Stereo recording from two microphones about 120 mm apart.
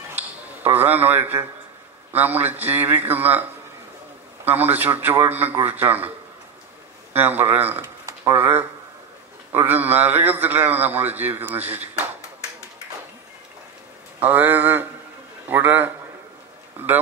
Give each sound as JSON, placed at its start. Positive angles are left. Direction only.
{"t": 0.7, "sound": "a man's voice", "side_deg": -15}
{"t": 4.7, "sound": "a man's voice", "side_deg": -15}
{"t": 7.2, "sound": "a man's voice", "side_deg": -15}
{"t": 14.2, "sound": "a man's voice", "side_deg": -15}